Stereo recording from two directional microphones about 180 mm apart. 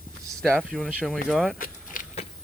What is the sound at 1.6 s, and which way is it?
Keys jangling, 45° left (ahead or behind).